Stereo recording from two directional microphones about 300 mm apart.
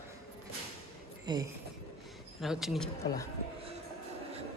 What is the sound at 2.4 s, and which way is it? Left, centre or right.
Speech, centre.